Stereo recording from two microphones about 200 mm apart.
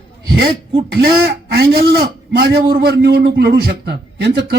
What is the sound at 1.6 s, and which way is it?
A man's voice, 50° right (ahead or behind).